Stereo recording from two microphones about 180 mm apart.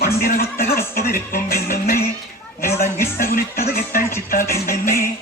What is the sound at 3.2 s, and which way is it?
Music, 50° left (ahead or behind).